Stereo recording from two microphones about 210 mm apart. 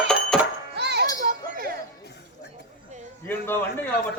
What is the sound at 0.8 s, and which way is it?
Children playing, 55° right (ahead or behind).